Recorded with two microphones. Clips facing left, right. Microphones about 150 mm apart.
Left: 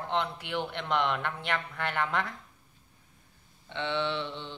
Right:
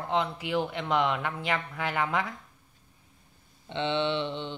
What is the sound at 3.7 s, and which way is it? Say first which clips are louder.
Mantra: right 3 dB; 20° right (ahead or behind).